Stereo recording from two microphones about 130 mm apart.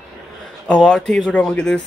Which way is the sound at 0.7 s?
5° left (ahead or behind).